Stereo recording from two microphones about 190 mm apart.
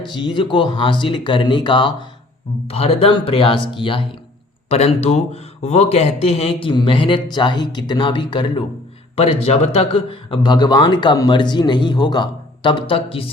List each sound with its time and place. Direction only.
0.0 s speech: 25° left (ahead or behind)